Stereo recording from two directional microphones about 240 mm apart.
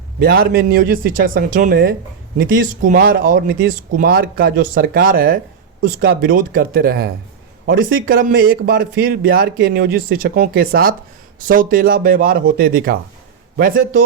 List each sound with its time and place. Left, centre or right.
0.2 s speech: right